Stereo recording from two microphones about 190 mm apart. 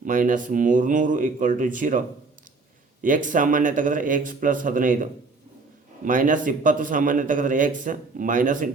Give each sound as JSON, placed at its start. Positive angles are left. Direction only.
{"t": 0.0, "sound": "a man's voice", "side_deg": -45}
{"t": 3.0, "sound": "a man's voice", "side_deg": -45}
{"t": 6.1, "sound": "a man's voice", "side_deg": -45}